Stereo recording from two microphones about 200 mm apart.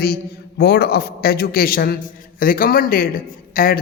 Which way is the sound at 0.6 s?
55° left (ahead or behind).